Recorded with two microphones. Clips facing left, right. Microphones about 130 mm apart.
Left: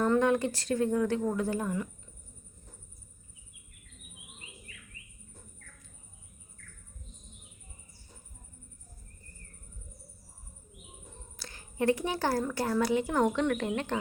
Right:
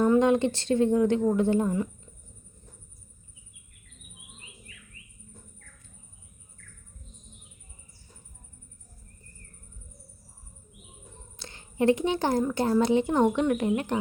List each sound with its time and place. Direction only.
0.0 s a woman's voice: 20° right (ahead or behind)
11.3 s a woman's voice: 25° right (ahead or behind)